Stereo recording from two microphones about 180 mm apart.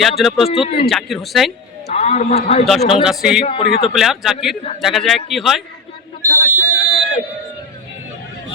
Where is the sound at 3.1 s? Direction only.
5° right (ahead or behind).